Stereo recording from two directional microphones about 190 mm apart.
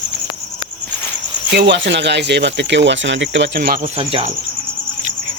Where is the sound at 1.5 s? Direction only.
65° right (ahead or behind).